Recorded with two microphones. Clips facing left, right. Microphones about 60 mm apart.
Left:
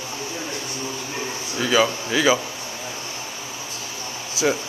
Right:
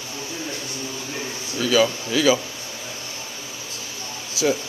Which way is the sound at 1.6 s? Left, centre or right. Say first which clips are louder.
Even; left.